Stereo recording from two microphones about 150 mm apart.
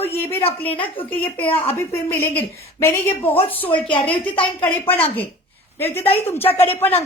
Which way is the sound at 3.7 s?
35° left (ahead or behind).